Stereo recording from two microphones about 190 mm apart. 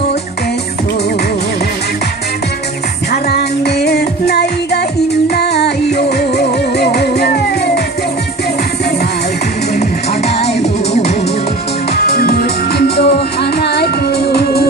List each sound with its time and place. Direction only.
3.1 s music: 60° left (ahead or behind)
10.6 s music: 35° left (ahead or behind)
11.9 s music: 55° left (ahead or behind)